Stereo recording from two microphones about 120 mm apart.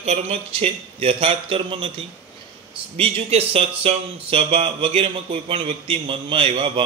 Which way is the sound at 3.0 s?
55° right (ahead or behind).